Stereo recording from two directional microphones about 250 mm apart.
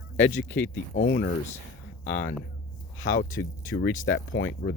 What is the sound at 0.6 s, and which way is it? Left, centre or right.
Speech, left.